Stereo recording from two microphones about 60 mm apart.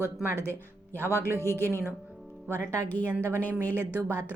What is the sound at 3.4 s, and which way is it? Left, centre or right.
Speech, left.